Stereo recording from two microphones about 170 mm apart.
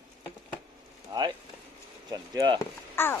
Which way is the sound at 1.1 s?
25° right (ahead or behind).